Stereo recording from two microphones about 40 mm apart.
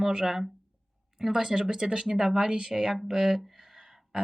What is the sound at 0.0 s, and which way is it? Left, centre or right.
Speech, centre.